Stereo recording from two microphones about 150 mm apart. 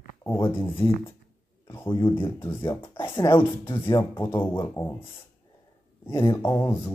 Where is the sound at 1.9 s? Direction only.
30° left (ahead or behind); by 4.9 s 15° left (ahead or behind).